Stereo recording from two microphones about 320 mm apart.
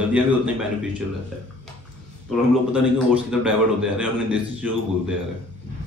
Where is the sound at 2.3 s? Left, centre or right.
Centre.